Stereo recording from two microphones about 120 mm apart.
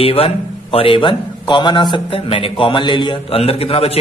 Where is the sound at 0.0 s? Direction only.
50° left (ahead or behind).